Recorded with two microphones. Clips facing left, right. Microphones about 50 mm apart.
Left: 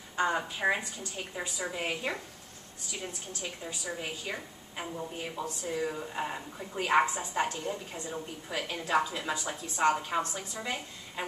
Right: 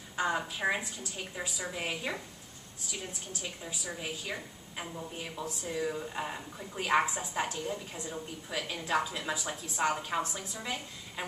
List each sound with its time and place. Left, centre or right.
0.1 s a sound: centre
0.5 s a woman's voice: centre
1.6 s a woman's voice: centre
7.2 s a woman's voice: centre
7.5 s speech: centre
8.8 s a woman's voice: centre